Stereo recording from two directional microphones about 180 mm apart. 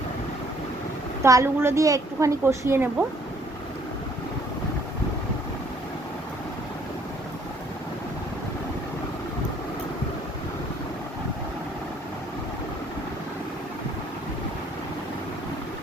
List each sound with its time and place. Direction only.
1.2 s a woman's voice: 15° right (ahead or behind)